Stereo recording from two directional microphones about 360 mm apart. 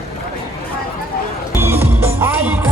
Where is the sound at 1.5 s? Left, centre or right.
Centre.